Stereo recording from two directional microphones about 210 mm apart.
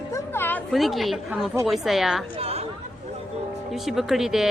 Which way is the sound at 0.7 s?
Centre (ahead or behind).